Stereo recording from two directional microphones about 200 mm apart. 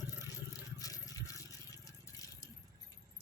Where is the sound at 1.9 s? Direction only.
15° left (ahead or behind).